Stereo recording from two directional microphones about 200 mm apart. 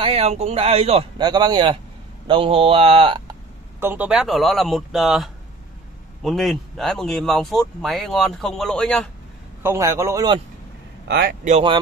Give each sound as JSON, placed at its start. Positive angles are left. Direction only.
{"t": 0.0, "sound": "a man's voice", "side_deg": -30}
{"t": 3.8, "sound": "speech", "side_deg": -10}
{"t": 9.6, "sound": "a man's voice", "side_deg": -15}
{"t": 11.1, "sound": "a man's voice", "side_deg": -50}
{"t": 11.4, "sound": "a man's voice", "side_deg": -30}